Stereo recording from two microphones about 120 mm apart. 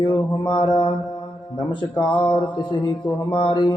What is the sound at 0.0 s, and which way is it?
Mantra, 45° left (ahead or behind).